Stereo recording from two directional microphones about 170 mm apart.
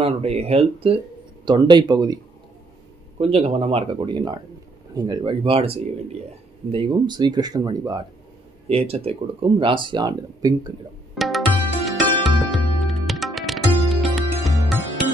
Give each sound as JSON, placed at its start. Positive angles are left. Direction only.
{"t": 0.0, "sound": "speech", "side_deg": -35}
{"t": 3.2, "sound": "speech", "side_deg": -35}
{"t": 8.6, "sound": "speech", "side_deg": -35}
{"t": 11.1, "sound": "music", "side_deg": 0}